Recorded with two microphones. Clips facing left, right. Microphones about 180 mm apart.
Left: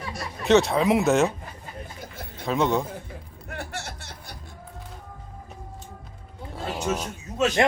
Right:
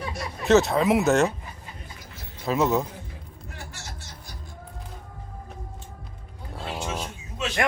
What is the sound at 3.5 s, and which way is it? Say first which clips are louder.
Music: left 8 dB; 60° left (ahead or behind).